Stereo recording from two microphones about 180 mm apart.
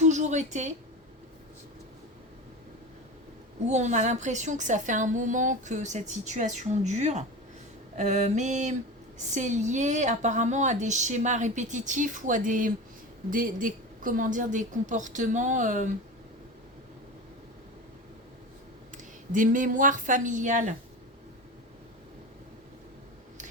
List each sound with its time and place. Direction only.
0.0 s a sound: 40° right (ahead or behind)
3.7 s a woman's voice: 40° right (ahead or behind)
18.9 s a woman's voice: 45° right (ahead or behind)